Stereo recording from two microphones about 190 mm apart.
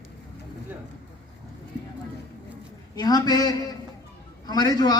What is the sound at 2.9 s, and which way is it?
A man's voice, 20° left (ahead or behind).